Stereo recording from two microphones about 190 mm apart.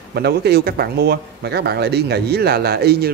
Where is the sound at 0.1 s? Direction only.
60° right (ahead or behind).